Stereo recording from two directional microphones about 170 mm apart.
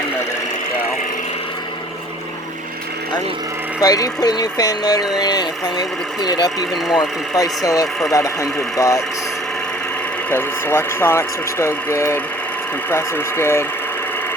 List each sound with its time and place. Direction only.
3.8 s speech: 20° left (ahead or behind)
10.2 s speech: 15° left (ahead or behind)